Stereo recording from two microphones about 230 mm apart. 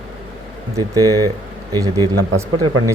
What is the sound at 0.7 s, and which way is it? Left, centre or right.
Speech, centre.